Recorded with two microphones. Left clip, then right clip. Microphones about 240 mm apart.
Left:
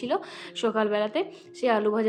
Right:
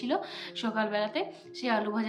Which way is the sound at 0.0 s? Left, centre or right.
Centre.